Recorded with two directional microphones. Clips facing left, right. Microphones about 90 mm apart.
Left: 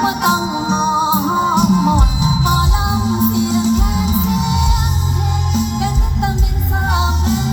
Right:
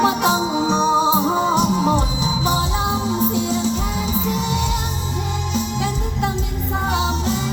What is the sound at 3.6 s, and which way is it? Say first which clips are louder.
Music: left 5 dB; 30° right (ahead or behind).